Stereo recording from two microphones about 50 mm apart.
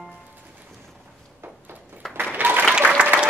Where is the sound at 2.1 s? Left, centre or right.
Right.